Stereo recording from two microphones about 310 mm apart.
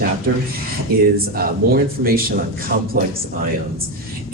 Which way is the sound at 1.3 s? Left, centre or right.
Right.